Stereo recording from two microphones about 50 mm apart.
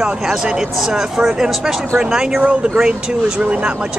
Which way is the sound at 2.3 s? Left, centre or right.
Right.